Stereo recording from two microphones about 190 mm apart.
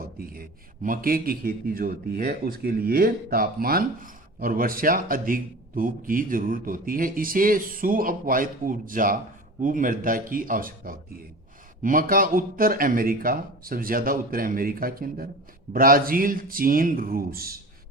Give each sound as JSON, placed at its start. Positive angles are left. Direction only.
{"t": 0.2, "sound": "a man's voice", "side_deg": -50}